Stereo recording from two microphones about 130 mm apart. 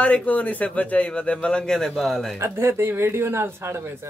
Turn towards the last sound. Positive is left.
turn(degrees=-20)  # may be behind; listen again after turning